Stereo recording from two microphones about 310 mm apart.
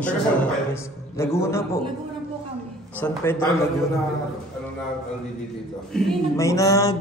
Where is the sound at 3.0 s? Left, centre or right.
Centre.